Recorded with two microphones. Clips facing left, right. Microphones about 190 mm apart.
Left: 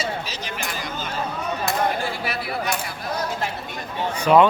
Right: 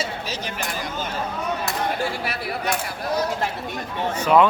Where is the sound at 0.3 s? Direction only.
50° right (ahead or behind).